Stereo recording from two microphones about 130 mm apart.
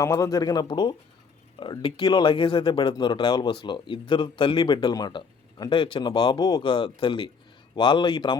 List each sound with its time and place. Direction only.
0.0 s speech: 25° left (ahead or behind)